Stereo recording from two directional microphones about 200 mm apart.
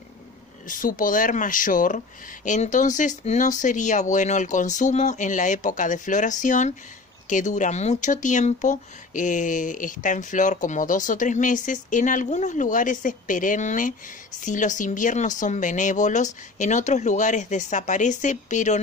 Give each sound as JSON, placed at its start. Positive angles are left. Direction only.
{"t": 0.7, "sound": "speech", "side_deg": 40}